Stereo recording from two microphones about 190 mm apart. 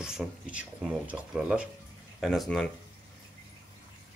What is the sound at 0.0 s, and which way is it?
Speech, 5° right (ahead or behind).